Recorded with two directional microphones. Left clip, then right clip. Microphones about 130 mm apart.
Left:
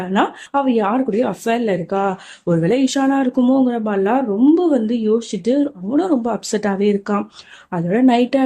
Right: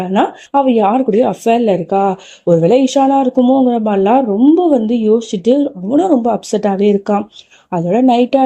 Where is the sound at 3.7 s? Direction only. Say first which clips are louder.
Right 6 dB; 30° right (ahead or behind).